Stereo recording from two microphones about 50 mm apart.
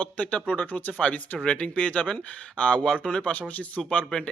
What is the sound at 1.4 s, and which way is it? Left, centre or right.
Speech, left.